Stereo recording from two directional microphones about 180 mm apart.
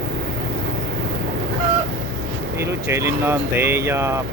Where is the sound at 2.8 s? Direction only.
15° right (ahead or behind).